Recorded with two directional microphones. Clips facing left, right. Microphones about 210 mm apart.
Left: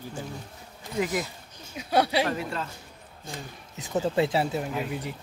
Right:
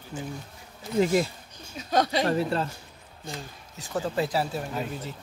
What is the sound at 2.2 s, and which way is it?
Speech, 35° right (ahead or behind).